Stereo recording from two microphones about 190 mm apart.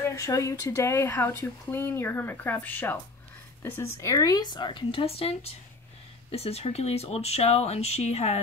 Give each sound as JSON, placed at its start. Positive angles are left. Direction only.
{"t": 0.0, "sound": "speech", "side_deg": 15}